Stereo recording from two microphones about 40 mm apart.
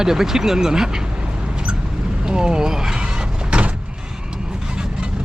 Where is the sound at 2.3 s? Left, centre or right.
Centre.